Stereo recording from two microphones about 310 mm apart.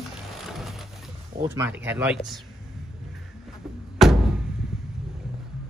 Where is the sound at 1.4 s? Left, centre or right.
Centre.